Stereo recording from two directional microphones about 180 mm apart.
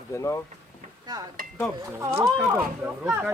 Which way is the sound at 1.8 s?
15° right (ahead or behind).